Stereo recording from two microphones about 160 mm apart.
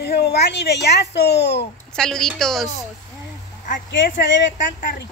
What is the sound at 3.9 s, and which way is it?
Speech, 75° left (ahead or behind).